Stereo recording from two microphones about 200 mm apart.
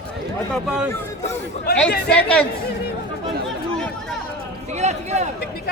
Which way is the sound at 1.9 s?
55° left (ahead or behind).